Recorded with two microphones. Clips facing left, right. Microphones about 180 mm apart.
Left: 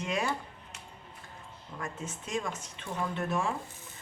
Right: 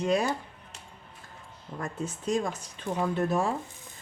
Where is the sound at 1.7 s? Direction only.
35° right (ahead or behind).